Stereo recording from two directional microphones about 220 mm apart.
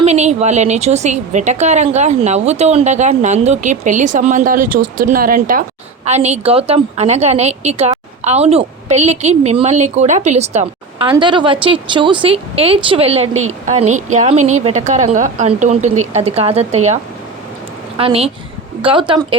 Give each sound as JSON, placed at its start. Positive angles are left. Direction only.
{"t": 0.0, "sound": "a woman's voice", "side_deg": -30}